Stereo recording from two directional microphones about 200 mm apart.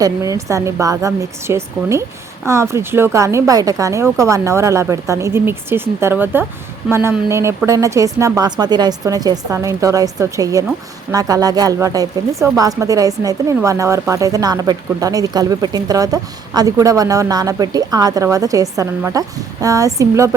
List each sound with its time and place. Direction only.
0.0 s a woman's voice: 15° right (ahead or behind)